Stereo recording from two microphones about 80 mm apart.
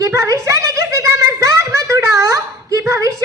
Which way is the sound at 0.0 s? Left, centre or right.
Right.